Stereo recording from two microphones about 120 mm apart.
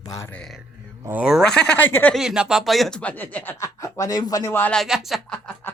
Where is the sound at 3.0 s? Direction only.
10° left (ahead or behind).